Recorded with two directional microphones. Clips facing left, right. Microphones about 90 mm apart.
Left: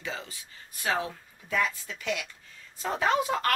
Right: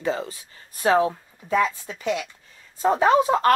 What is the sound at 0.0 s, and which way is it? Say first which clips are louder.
Speech: right 11 dB; 40° right (ahead or behind).